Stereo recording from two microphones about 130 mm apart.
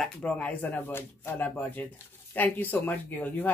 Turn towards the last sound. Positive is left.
turn(degrees=15)  # may be behind; listen again after turning